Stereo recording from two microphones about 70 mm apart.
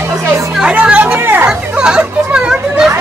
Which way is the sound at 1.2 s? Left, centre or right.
Right.